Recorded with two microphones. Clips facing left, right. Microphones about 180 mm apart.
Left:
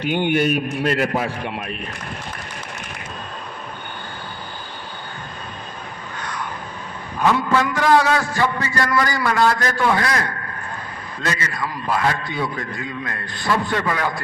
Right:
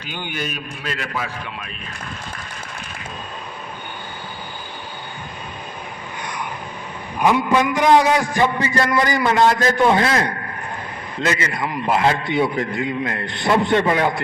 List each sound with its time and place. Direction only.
0.0 s a man's voice: 60° left (ahead or behind)
6.1 s vehicle: 15° right (ahead or behind)
7.2 s a man's voice: 15° right (ahead or behind)